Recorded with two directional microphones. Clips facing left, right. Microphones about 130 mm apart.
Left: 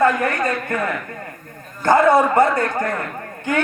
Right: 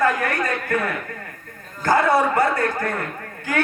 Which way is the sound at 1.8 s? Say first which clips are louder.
Left 4 dB; 25° left (ahead or behind).